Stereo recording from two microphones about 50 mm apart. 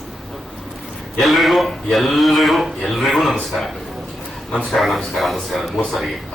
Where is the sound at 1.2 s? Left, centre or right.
Centre.